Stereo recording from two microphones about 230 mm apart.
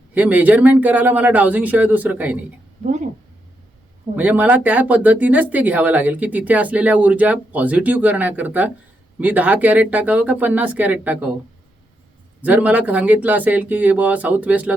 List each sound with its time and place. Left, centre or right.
0.1 s speech: centre
2.8 s speech: right
4.1 s speech: centre
12.4 s speech: centre